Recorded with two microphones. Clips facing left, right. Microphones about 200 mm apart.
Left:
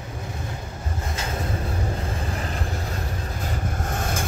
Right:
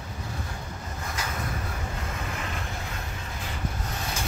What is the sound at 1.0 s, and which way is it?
Vehicle, 25° left (ahead or behind).